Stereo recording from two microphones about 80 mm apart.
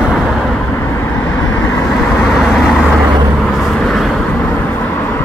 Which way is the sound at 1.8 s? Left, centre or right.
Centre.